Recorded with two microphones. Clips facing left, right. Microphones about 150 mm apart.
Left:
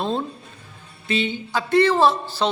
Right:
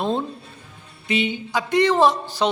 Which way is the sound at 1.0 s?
15° right (ahead or behind).